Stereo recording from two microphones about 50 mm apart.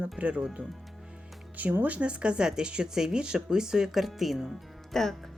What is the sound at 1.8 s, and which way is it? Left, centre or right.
Speech, right.